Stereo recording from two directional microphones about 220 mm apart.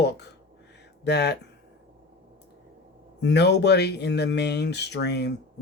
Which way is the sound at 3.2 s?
50° left (ahead or behind).